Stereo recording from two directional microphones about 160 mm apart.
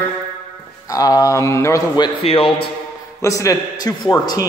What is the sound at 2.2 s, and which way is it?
Speech, 35° left (ahead or behind).